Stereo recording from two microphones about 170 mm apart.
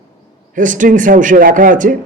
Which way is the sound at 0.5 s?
50° right (ahead or behind).